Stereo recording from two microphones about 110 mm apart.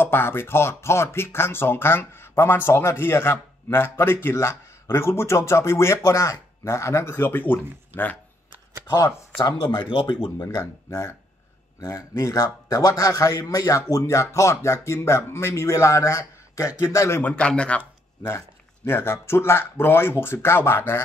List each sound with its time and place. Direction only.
0.0 s speech: 20° left (ahead or behind)
8.8 s a man's voice: 35° left (ahead or behind)
9.8 s speech: 50° left (ahead or behind)
10.6 s a man's voice: 25° left (ahead or behind)
17.2 s speech: 10° left (ahead or behind)